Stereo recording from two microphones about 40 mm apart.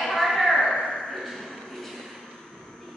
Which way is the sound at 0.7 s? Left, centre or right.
Centre.